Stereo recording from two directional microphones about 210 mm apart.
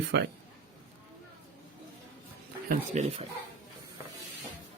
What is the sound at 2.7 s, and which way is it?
Speech, 30° right (ahead or behind).